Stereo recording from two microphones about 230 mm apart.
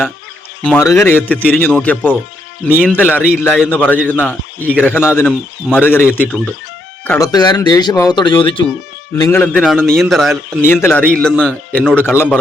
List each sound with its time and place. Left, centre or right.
0.6 s a man's voice: centre